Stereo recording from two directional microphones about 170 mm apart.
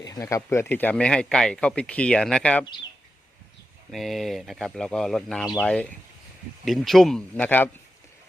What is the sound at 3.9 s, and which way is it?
Speech, centre (ahead or behind).